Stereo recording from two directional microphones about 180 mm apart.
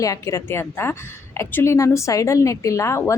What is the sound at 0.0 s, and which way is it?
Speech, 20° left (ahead or behind).